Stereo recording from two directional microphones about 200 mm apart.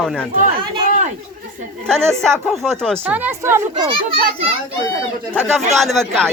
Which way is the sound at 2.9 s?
10° right (ahead or behind).